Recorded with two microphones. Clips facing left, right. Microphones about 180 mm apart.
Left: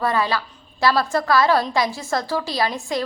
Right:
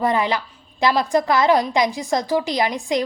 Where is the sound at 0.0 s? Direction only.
20° right (ahead or behind).